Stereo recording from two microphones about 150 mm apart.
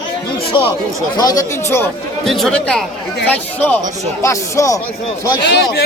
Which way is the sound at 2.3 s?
Centre (ahead or behind).